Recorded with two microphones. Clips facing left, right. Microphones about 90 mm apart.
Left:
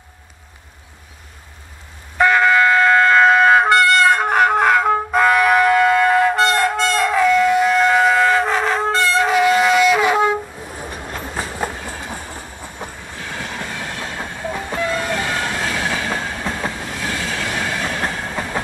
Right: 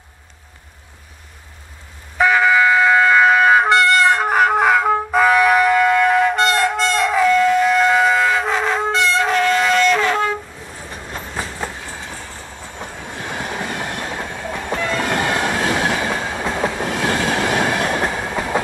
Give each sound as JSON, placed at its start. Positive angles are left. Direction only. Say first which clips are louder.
{"t": 2.1, "sound": "music", "louder": "even", "side_deg": 0}
{"t": 11.1, "sound": "train", "louder": "even", "side_deg": 0}
{"t": 11.5, "sound": "train", "louder": "left 3 dB", "side_deg": 10}
{"t": 13.3, "sound": "train", "louder": "right 3 dB", "side_deg": -15}
{"t": 14.1, "sound": "train", "louder": "even", "side_deg": 0}
{"t": 15.2, "sound": "train", "louder": "right 3 dB", "side_deg": -20}
{"t": 16.7, "sound": "train", "louder": "right 6 dB", "side_deg": -65}
{"t": 18.0, "sound": "train", "louder": "right 2 dB", "side_deg": -5}